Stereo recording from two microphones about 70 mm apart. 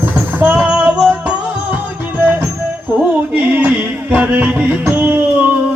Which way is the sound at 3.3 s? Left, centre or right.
Right.